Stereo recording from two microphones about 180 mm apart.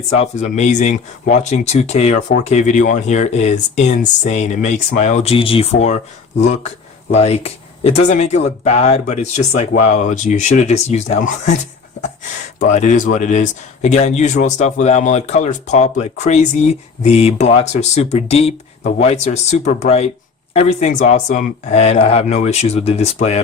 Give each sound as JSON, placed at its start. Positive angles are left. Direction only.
{"t": 0.1, "sound": "speech", "side_deg": 40}
{"t": 12.5, "sound": "speech", "side_deg": 45}